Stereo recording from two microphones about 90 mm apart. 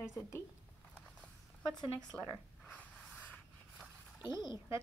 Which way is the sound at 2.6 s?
15° left (ahead or behind).